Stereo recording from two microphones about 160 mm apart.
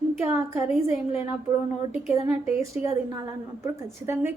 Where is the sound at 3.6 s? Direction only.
15° right (ahead or behind).